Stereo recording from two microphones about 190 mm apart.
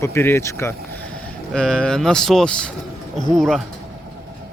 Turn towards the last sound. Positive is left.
turn(degrees=0)  # may be behind; listen again after turning